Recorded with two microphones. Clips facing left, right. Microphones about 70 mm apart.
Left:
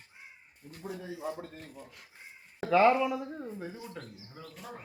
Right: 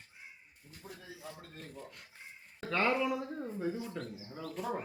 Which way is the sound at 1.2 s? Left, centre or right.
Left.